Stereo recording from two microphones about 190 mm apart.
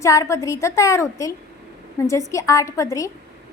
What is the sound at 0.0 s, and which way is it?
A woman's voice, 15° left (ahead or behind).